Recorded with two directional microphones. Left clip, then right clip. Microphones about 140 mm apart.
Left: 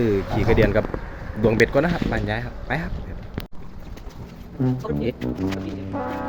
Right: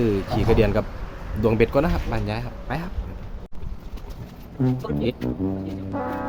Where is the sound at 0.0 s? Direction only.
20° right (ahead or behind).